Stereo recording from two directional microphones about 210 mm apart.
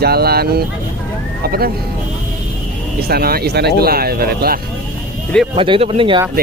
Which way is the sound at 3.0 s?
45° right (ahead or behind).